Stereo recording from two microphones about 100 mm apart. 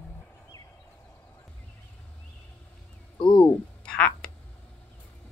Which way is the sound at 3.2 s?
50° left (ahead or behind).